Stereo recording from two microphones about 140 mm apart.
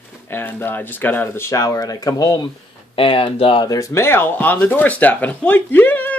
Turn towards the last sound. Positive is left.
turn(degrees=15)  # may be behind; listen again after turning